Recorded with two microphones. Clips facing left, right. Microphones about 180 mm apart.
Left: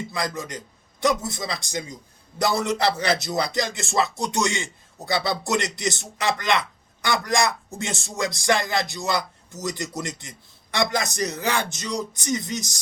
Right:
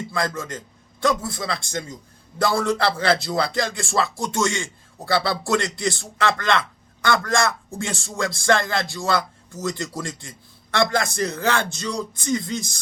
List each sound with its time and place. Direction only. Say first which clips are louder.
0.1 s a man's voice: right 3 dB; 20° left (ahead or behind)